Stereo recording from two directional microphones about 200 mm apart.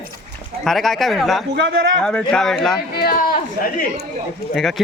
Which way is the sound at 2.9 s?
50° left (ahead or behind).